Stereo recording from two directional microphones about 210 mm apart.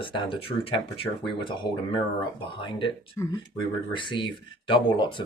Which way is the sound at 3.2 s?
10° left (ahead or behind).